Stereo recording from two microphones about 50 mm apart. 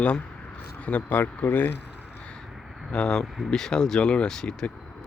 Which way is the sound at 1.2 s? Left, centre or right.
Left.